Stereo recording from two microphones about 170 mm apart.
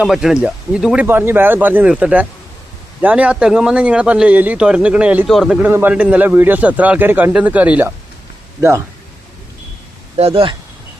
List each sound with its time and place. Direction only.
0.0 s a man's voice: centre (ahead or behind)
10.2 s speech: 35° right (ahead or behind)